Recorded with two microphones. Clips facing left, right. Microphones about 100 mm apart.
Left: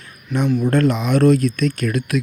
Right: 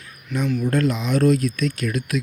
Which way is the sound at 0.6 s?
60° left (ahead or behind).